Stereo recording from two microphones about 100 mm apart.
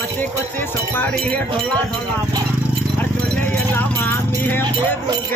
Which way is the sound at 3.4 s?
20° left (ahead or behind).